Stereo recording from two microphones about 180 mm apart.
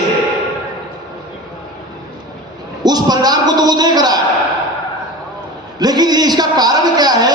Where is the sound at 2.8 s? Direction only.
20° right (ahead or behind).